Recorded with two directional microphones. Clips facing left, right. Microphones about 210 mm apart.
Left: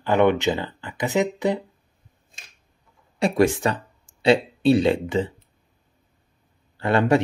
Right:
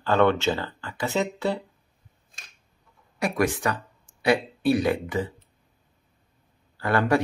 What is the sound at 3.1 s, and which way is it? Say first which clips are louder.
Speech: left 5 dB; 25° left (ahead or behind).